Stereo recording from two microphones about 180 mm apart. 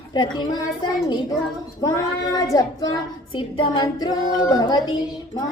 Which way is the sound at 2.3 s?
20° left (ahead or behind).